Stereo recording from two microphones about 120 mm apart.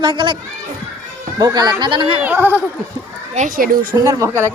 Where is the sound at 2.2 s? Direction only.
15° right (ahead or behind).